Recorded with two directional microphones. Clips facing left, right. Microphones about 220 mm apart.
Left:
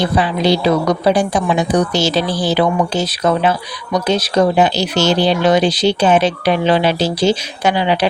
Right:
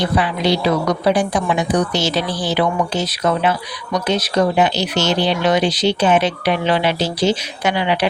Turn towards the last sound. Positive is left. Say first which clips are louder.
# left 3 dB
turn(degrees=35)  # may be behind; listen again after turning